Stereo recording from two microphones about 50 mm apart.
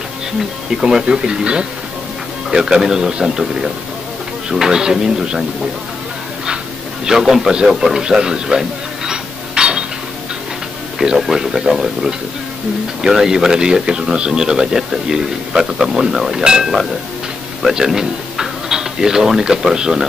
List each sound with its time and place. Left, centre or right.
0.7 s speech: centre
7.1 s speech: centre
7.7 s a sound: centre
11.1 s speech: centre